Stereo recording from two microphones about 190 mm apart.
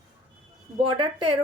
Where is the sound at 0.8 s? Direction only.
25° right (ahead or behind).